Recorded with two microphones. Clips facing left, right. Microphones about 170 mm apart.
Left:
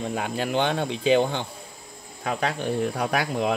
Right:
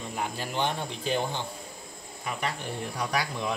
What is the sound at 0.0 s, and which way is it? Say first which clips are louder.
Speech: left 6 dB; 85° left.